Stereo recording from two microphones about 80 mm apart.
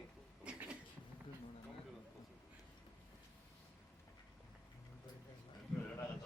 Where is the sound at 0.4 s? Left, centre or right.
Centre.